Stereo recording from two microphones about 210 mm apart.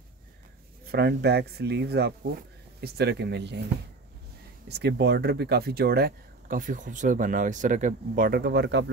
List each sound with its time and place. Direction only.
0.9 s speech: 50° right (ahead or behind)
4.6 s speech: 50° right (ahead or behind)